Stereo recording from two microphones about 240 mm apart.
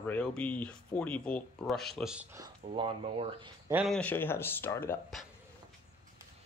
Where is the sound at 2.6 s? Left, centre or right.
Right.